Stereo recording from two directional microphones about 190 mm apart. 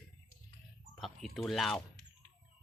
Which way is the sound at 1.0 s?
Centre (ahead or behind).